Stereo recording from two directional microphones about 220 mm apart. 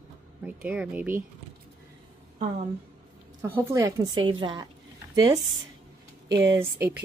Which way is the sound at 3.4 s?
10° right (ahead or behind).